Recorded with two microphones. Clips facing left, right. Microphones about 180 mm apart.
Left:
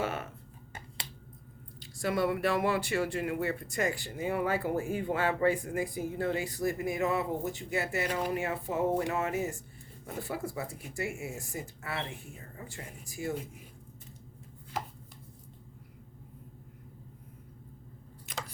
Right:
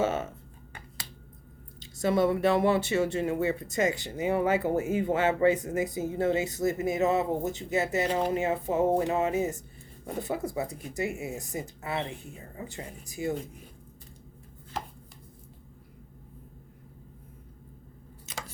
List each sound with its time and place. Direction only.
0.0 s speech: 25° right (ahead or behind)
1.8 s speech: 25° right (ahead or behind)